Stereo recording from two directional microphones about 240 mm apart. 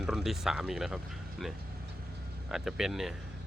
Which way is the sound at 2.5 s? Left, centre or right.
Centre.